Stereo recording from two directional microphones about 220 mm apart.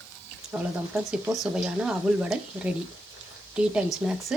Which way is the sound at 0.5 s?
5° right (ahead or behind).